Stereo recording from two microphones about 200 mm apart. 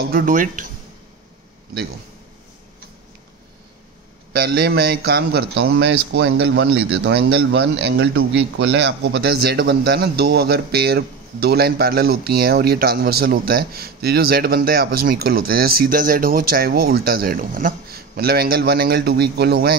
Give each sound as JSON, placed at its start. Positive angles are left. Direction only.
{"t": 0.0, "sound": "a man's voice", "side_deg": -45}
{"t": 4.3, "sound": "speech", "side_deg": -50}
{"t": 7.3, "sound": "a man's voice", "side_deg": -60}